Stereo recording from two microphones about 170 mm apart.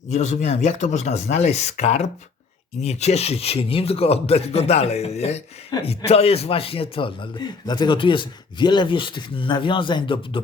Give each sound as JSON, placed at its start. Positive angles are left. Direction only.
{"t": 0.1, "sound": "a man's voice", "side_deg": 40}